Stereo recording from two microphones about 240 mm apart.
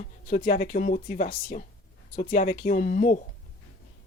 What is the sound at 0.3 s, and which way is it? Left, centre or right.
Speech, left.